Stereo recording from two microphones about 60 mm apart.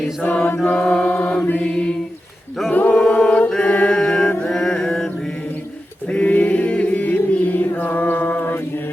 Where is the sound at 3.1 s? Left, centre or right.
Left.